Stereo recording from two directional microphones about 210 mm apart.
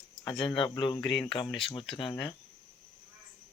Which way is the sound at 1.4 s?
Centre (ahead or behind).